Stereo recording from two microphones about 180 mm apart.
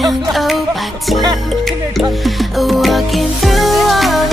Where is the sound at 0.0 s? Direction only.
Centre (ahead or behind).